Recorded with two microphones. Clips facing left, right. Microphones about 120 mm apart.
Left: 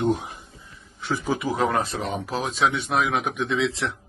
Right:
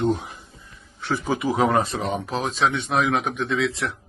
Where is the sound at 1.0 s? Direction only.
Centre (ahead or behind).